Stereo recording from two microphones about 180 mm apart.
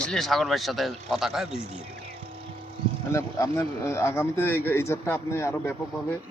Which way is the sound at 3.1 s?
15° left (ahead or behind).